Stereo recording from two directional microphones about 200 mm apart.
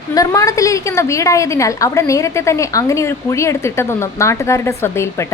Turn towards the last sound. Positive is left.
turn(degrees=15)  # may be behind; listen again after turning